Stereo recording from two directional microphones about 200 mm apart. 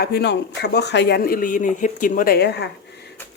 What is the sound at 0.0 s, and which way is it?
Speech, 55° left (ahead or behind).